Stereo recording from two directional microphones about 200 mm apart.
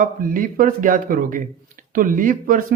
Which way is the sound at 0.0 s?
45° right (ahead or behind).